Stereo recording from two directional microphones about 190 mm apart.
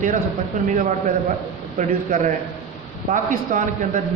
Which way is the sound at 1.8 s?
40° right (ahead or behind).